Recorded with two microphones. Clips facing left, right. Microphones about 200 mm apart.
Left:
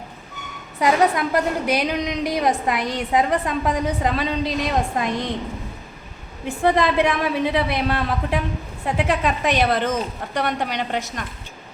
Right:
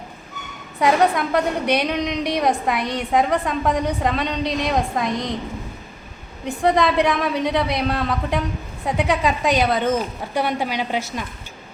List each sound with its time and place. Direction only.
0.8 s a woman's voice: centre (ahead or behind)
6.4 s a woman's voice: centre (ahead or behind)